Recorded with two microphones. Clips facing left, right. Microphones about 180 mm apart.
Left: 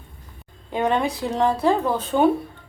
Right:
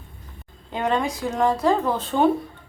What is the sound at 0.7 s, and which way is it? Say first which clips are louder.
Speech: left 2 dB; 15° left (ahead or behind).